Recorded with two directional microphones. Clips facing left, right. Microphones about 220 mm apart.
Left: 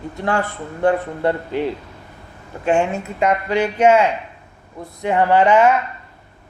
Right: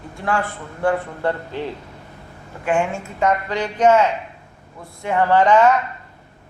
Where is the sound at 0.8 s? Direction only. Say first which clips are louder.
Left 3 dB; 20° left (ahead or behind).